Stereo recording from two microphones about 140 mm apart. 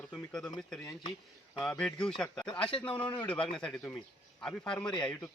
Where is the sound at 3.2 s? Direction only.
10° left (ahead or behind).